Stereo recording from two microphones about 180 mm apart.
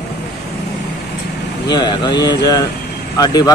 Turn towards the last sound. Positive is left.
turn(degrees=20)  # may be behind; listen again after turning